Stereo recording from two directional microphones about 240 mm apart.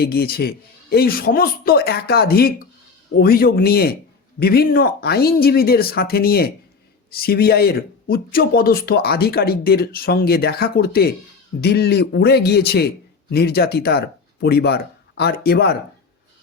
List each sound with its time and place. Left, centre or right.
0.0 s speech: left